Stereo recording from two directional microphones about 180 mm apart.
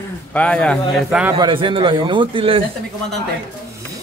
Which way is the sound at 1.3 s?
30° right (ahead or behind).